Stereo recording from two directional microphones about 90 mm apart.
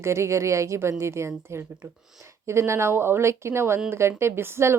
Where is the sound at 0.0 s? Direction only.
30° right (ahead or behind).